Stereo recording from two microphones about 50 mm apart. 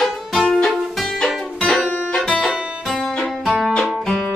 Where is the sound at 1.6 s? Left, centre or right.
Left.